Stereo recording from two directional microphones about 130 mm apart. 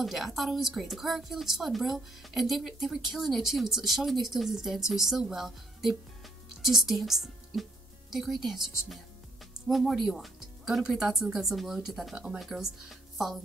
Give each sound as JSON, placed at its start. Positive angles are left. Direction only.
{"t": 0.0, "sound": "a woman's voice", "side_deg": 0}